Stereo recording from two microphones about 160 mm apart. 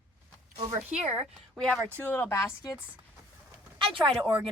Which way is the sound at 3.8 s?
35° right (ahead or behind).